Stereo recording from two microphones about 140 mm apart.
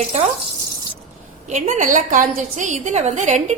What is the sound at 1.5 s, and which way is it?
A woman's voice, 60° right (ahead or behind).